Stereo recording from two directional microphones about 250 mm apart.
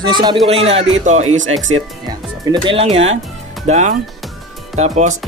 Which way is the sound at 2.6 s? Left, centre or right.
Right.